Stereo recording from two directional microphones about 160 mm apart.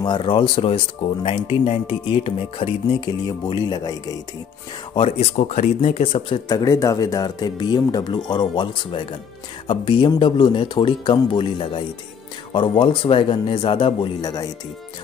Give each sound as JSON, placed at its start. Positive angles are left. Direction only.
{"t": 0.0, "sound": "speech", "side_deg": 30}
{"t": 4.9, "sound": "speech", "side_deg": 40}